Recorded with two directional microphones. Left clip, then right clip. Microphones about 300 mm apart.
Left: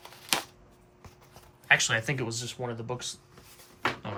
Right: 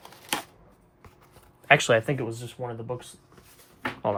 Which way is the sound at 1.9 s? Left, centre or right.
Centre.